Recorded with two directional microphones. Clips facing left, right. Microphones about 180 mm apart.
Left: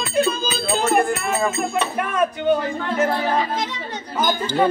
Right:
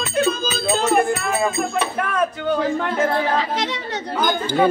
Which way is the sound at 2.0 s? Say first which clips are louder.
Left 1 dB; 20° left (ahead or behind).